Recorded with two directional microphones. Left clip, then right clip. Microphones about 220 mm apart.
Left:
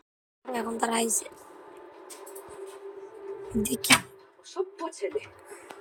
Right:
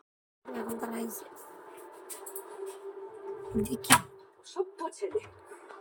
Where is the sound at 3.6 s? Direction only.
Centre (ahead or behind).